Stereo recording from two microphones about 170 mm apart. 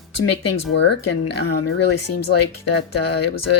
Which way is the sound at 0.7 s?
90° left.